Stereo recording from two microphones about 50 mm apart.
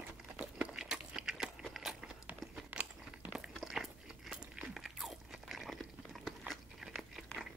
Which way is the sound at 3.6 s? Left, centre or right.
Centre.